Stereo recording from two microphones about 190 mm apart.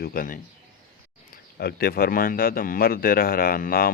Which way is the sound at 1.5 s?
55° left (ahead or behind).